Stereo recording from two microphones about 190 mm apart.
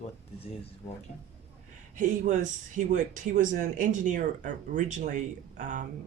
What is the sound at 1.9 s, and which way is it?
Speech, 40° right (ahead or behind).